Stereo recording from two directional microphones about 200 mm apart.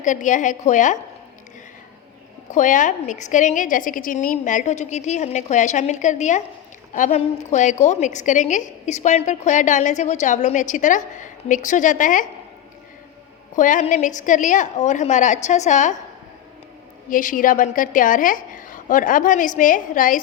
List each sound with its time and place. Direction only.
0.0 s a woman's voice: 40° left (ahead or behind)
2.5 s a woman's voice: 40° left (ahead or behind)
13.6 s a woman's voice: 40° left (ahead or behind)
17.1 s a woman's voice: 40° left (ahead or behind)